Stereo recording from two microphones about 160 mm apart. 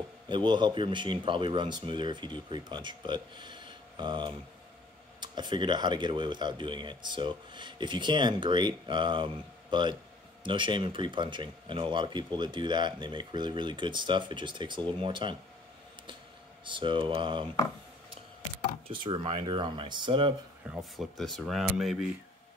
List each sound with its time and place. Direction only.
0.3 s speech: 30° right (ahead or behind)
16.6 s speech: 30° right (ahead or behind)
18.9 s speech: 35° right (ahead or behind)
20.9 s speech: centre (ahead or behind)